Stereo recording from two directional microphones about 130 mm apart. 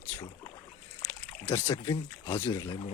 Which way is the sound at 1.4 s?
15° left (ahead or behind).